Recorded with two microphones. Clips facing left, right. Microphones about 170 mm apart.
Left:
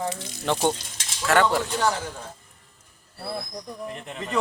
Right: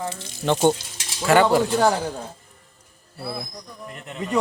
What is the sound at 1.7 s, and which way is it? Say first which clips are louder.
Speech: right 5 dB; 35° right (ahead or behind).